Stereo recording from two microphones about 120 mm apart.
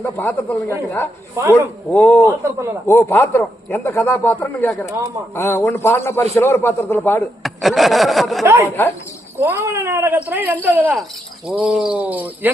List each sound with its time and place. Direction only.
0.0 s speech: 15° left (ahead or behind)
2.4 s speech: 25° right (ahead or behind)
2.8 s a man's voice: 25° left (ahead or behind)
7.4 s a sound: centre (ahead or behind)
8.4 s speech: 25° right (ahead or behind)
11.4 s speech: 5° right (ahead or behind)